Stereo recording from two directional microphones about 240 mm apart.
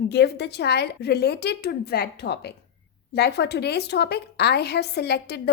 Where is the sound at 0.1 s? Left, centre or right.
Left.